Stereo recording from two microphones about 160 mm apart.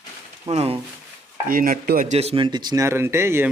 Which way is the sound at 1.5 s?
60° right (ahead or behind).